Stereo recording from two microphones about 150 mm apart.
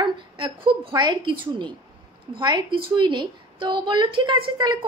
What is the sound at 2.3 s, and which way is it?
A woman's voice, 35° right (ahead or behind).